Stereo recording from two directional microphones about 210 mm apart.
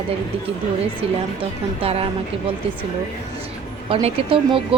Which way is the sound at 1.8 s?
30° right (ahead or behind).